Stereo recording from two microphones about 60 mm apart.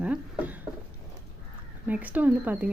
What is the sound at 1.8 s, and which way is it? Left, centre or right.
Speech, right.